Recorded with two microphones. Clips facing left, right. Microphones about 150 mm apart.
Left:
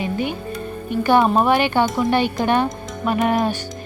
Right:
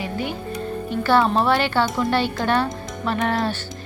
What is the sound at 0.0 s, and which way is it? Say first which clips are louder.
Music: left 4 dB; 20° left (ahead or behind).